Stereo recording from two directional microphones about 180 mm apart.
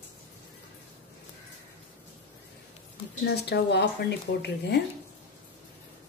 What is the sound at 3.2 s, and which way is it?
Speech, 65° left (ahead or behind).